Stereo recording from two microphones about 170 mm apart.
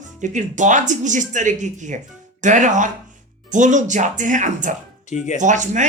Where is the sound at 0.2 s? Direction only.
45° right (ahead or behind).